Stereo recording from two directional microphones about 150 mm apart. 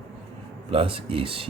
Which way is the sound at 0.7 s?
40° right (ahead or behind).